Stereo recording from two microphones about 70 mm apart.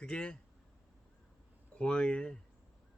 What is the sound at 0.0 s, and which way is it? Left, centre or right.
Speech, centre.